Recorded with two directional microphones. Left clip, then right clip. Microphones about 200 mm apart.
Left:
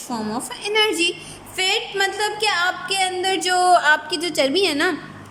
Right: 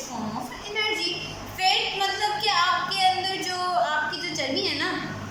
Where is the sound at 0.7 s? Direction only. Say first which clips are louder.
Left 8 dB; 55° left (ahead or behind).